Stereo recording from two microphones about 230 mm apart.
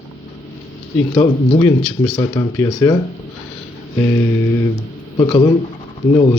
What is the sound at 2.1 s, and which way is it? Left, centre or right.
Speech, centre.